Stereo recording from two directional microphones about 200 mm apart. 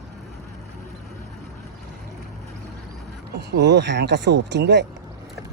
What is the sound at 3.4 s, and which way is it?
Speech, 60° right (ahead or behind).